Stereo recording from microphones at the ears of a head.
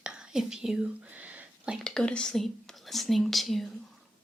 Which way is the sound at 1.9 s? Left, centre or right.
Centre.